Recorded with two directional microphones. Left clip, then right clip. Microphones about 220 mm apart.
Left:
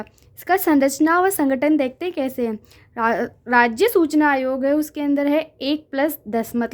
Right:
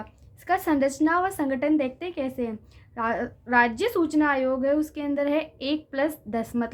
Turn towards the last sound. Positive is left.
turn(degrees=40)  # may be behind; listen again after turning